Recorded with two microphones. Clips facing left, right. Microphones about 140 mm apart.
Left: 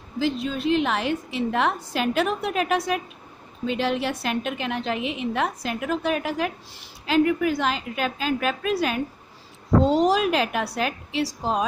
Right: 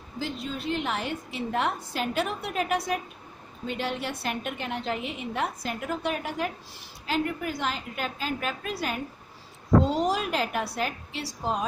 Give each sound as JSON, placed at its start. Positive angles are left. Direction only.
{"t": 0.2, "sound": "a woman's voice", "side_deg": 90}